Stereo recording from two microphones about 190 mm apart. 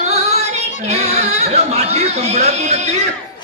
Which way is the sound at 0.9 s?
35° right (ahead or behind).